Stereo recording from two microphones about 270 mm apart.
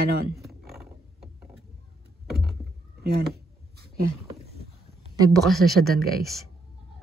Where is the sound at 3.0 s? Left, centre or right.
Right.